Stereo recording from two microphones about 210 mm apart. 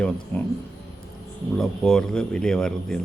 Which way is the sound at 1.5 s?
Centre (ahead or behind).